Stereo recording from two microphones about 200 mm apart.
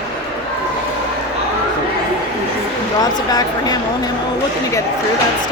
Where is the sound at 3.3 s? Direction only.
20° left (ahead or behind).